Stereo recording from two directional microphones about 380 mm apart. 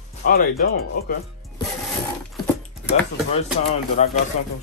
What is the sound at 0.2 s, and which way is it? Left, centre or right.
Speech, left.